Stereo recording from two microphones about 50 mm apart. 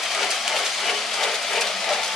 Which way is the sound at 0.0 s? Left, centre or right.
Centre.